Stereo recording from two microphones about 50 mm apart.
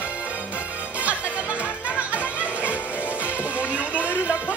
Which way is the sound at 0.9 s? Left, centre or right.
Right.